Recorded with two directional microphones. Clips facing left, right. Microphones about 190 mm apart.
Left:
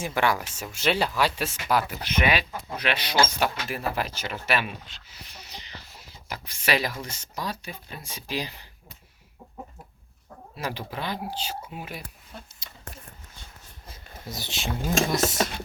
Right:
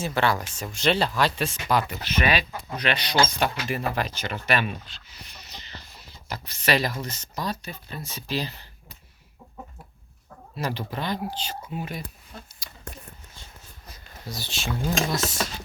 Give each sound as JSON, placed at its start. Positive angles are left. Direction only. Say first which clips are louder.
{"t": 0.0, "sound": "speech", "louder": "right 1 dB", "side_deg": 10}
{"t": 10.6, "sound": "speech", "louder": "right 3 dB", "side_deg": 10}
{"t": 13.8, "sound": "a sound", "louder": "even", "side_deg": 25}